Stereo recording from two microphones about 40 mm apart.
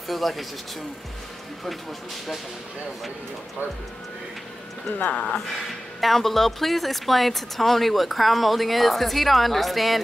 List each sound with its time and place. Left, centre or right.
0.1 s a woman's voice: centre
4.9 s speech: left
5.9 s a woman's voice: centre